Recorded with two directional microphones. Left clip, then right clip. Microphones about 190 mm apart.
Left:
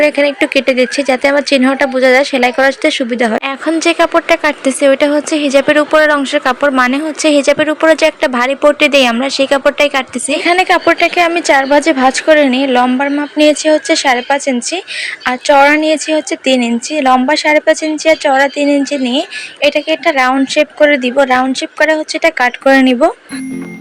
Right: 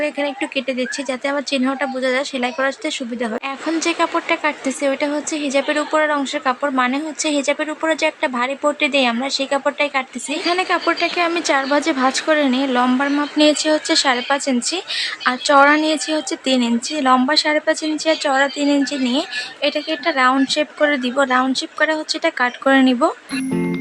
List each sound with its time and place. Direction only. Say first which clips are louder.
0.0 s speech: left 11 dB; 30° left (ahead or behind)